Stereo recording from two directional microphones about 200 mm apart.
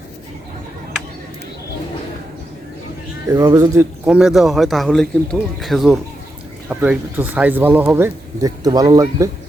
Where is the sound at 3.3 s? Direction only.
15° right (ahead or behind).